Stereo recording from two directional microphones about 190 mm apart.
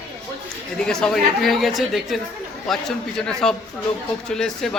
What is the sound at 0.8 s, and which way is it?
Speech, 5° left (ahead or behind).